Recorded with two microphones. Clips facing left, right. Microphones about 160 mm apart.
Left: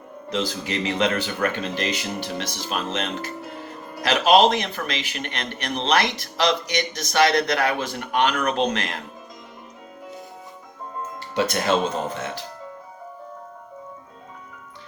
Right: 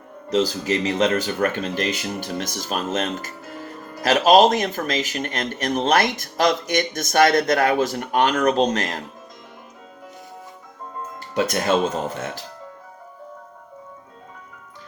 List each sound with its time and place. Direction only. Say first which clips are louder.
0.3 s speech: right 6 dB; 40° right (ahead or behind)
11.3 s speech: right 1 dB; 45° right (ahead or behind)